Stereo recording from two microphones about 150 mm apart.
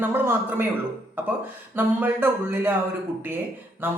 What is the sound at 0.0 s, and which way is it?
Speech, 15° right (ahead or behind).